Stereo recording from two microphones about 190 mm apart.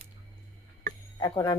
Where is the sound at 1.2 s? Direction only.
20° left (ahead or behind).